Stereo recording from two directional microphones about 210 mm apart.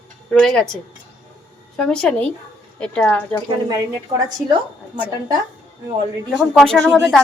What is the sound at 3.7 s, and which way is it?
A woman's voice, 15° right (ahead or behind).